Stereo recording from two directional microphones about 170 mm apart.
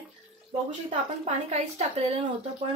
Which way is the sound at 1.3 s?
40° right (ahead or behind).